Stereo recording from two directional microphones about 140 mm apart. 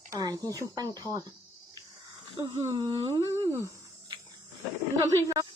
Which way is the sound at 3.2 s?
20° right (ahead or behind).